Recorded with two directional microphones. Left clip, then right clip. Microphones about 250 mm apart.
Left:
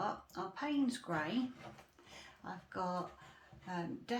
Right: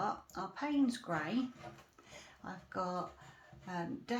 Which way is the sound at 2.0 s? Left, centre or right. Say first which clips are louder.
Even; centre.